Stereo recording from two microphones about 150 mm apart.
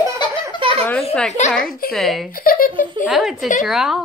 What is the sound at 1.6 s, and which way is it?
Speech, 80° left.